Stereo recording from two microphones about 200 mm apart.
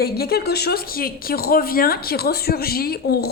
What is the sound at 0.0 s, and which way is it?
Speech, 50° left (ahead or behind).